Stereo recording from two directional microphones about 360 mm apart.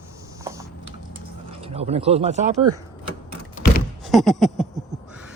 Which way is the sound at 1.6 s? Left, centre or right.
Centre.